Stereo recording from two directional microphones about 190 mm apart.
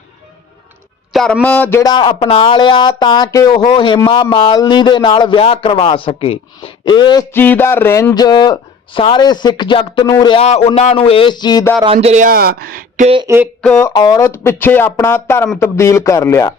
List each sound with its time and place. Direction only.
1.1 s speech: centre (ahead or behind)
1.8 s speech: 25° left (ahead or behind)
11.8 s speech: 30° right (ahead or behind); by 13.1 s 50° right (ahead or behind)
13.2 s speech: 15° right (ahead or behind)
13.6 s speech: 5° left (ahead or behind)
13.8 s speech: 20° left (ahead or behind)